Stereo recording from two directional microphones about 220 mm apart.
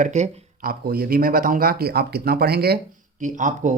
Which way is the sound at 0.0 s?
30° right (ahead or behind).